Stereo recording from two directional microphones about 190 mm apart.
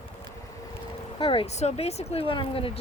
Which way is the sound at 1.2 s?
30° left (ahead or behind).